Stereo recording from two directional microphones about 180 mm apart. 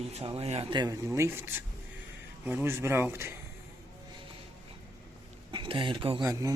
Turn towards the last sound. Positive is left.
turn(degrees=-20)  # may be behind; listen again after turning